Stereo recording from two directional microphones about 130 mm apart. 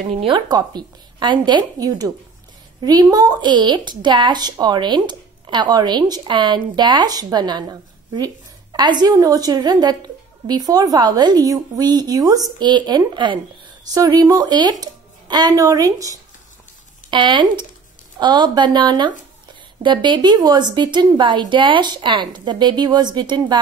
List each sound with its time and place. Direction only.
0.1 s speech: 50° right (ahead or behind)
0.5 s a woman's voice: 30° right (ahead or behind)
8.7 s a woman's voice: 35° right (ahead or behind)
17.1 s a woman's voice: 40° right (ahead or behind)